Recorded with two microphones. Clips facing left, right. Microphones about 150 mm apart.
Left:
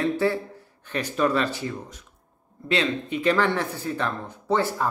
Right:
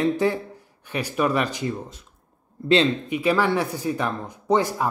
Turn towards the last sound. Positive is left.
turn(degrees=-15)  # may be behind; listen again after turning